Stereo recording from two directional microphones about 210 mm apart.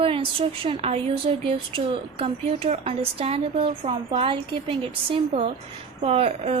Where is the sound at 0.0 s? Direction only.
25° right (ahead or behind).